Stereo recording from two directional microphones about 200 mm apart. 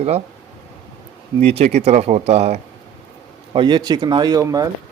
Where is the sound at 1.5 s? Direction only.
30° right (ahead or behind).